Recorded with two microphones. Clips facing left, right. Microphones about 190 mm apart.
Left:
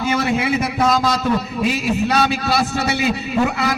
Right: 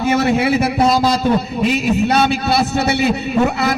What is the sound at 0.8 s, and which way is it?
Speech, 30° right (ahead or behind).